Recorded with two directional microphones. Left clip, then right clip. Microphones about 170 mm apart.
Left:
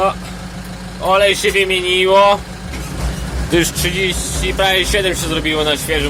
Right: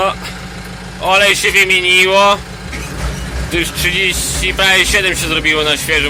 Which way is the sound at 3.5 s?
45° left (ahead or behind).